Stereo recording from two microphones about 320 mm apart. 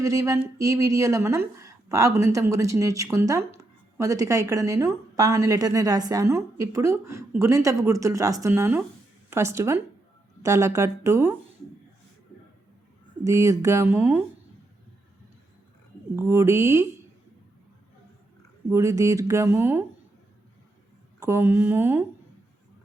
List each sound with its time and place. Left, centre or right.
0.0 s speech: centre
13.2 s speech: centre
16.1 s speech: centre
18.7 s speech: centre
21.2 s speech: centre